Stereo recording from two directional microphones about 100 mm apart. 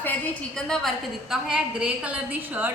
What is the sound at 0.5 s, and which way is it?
Speech, 5° left (ahead or behind).